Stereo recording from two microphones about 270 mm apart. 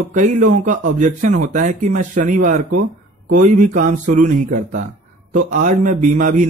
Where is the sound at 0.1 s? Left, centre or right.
Right.